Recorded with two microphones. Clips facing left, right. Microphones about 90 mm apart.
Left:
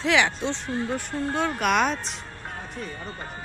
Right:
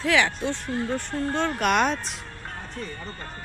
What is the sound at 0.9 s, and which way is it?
Speech, 10° left (ahead or behind).